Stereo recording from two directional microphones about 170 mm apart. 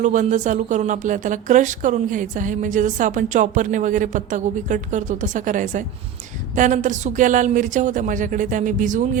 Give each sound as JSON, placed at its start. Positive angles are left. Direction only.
{"t": 0.0, "sound": "a woman's voice", "side_deg": -45}